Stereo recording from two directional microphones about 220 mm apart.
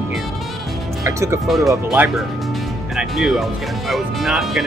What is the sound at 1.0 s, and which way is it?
Speech, 15° right (ahead or behind).